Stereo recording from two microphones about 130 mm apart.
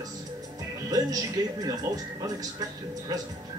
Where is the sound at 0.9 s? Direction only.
30° right (ahead or behind).